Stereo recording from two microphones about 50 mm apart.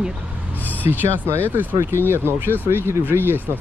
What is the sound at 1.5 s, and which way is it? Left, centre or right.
Speech, right.